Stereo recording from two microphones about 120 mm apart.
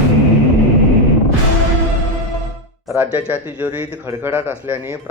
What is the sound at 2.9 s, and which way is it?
Speech, 15° right (ahead or behind).